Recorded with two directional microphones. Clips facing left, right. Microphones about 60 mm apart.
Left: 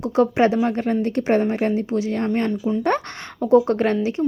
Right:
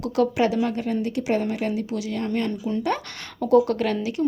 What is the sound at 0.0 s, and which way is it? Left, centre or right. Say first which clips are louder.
Speech: left 4 dB; left.